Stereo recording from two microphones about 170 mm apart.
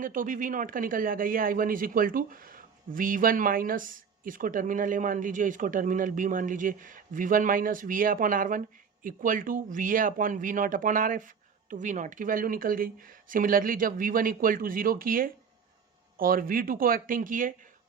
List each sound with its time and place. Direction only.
0.0 s speech: 55° right (ahead or behind)